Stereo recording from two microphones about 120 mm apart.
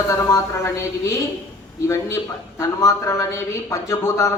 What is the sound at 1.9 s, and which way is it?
Speech, 25° left (ahead or behind).